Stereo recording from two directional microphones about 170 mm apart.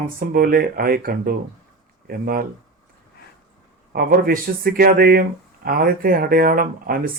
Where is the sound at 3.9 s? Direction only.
60° right (ahead or behind).